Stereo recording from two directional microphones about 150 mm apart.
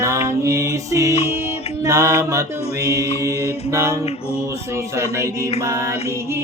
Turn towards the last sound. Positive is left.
turn(degrees=-20)  # may be behind; listen again after turning